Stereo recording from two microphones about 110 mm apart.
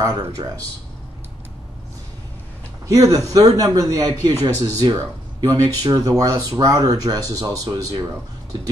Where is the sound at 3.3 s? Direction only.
35° right (ahead or behind).